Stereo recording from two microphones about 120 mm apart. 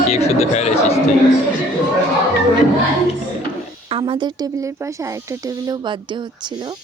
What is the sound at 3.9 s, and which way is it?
Speech, 45° right (ahead or behind).